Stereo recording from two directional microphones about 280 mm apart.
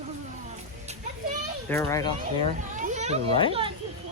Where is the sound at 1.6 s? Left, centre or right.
Centre.